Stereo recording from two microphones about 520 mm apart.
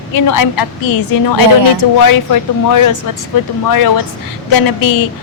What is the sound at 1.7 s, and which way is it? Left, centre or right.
A woman's voice, left.